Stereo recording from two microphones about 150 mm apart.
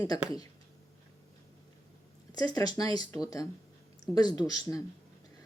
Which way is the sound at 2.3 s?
25° left (ahead or behind).